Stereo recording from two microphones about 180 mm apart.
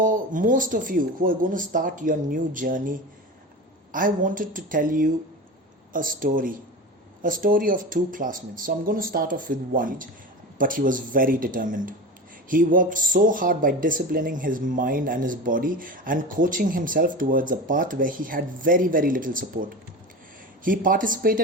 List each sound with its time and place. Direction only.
0.0 s speech: 45° right (ahead or behind)
3.9 s speech: 50° right (ahead or behind)
20.7 s speech: 50° right (ahead or behind)